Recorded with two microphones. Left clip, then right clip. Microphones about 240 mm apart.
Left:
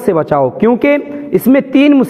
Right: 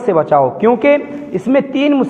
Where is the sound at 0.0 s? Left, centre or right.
Left.